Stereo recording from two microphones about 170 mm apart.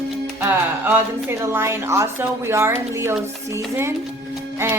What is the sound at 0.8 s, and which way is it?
Speech, 10° right (ahead or behind).